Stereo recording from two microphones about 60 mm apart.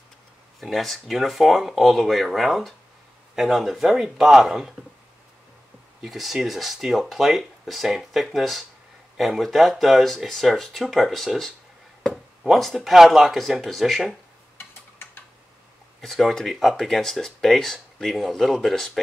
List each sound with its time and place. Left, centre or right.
0.6 s speech: centre
6.0 s speech: centre
14.7 s a sound: left
16.0 s speech: centre